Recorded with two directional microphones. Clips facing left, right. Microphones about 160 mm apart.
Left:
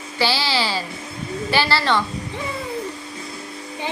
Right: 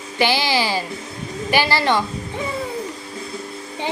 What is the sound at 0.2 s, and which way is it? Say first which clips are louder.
A woman's voice: right 2 dB; 15° right (ahead or behind).